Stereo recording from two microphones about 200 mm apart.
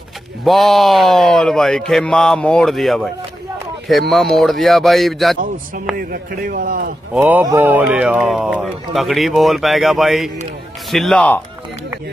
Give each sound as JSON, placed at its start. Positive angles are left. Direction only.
{"t": 0.4, "sound": "a man's voice", "side_deg": 0}
{"t": 4.1, "sound": "a man's voice", "side_deg": 0}
{"t": 5.9, "sound": "a man's voice", "side_deg": -45}
{"t": 7.2, "sound": "a man's voice", "side_deg": -10}